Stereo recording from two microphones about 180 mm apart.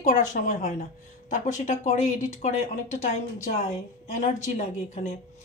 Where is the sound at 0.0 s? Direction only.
45° left (ahead or behind).